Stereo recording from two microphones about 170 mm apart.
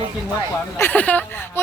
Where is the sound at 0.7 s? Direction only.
10° left (ahead or behind).